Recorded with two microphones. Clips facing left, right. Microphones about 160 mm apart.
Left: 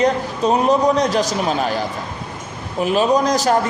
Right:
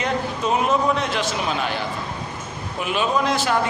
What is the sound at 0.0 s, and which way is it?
A man's voice, 40° left (ahead or behind).